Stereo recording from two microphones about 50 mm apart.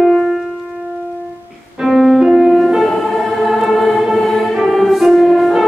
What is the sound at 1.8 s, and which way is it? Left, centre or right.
Music, centre.